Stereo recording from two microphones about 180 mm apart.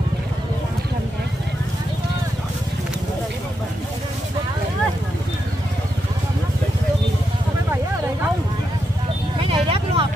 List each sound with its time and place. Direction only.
9.4 s vehicle: 30° right (ahead or behind)